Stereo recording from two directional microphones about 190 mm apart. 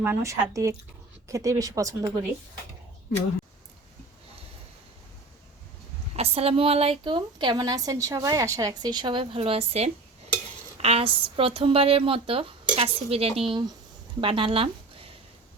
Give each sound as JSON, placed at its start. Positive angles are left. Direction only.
{"t": 0.0, "sound": "speech", "side_deg": -15}
{"t": 6.1, "sound": "a woman's voice", "side_deg": -30}